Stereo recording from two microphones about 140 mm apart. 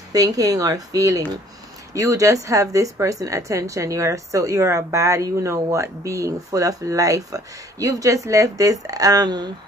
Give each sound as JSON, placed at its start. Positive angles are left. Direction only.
{"t": 0.1, "sound": "a woman's voice", "side_deg": -25}